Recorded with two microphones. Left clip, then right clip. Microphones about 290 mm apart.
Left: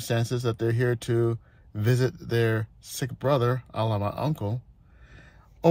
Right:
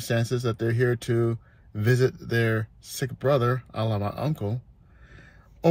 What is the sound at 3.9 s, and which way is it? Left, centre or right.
Speech, centre.